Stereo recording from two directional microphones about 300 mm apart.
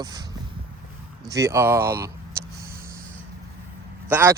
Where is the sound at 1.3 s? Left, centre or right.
Centre.